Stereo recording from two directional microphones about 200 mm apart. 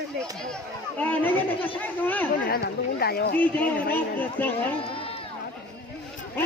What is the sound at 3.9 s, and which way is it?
Speech, 10° left (ahead or behind).